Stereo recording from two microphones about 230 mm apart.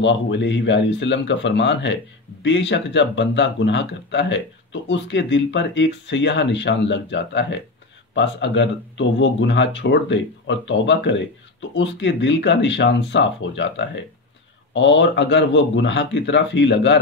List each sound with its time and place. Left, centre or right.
0.0 s speech: left